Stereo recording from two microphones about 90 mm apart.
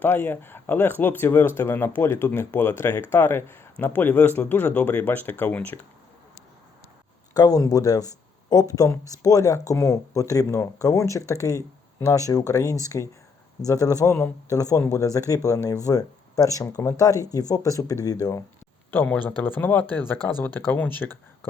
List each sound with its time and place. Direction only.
0.0 s speech: 20° left (ahead or behind)
7.3 s speech: 45° left (ahead or behind)
18.9 s speech: 15° left (ahead or behind)